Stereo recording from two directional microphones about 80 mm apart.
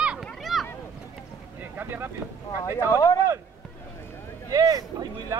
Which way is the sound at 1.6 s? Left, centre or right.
Right.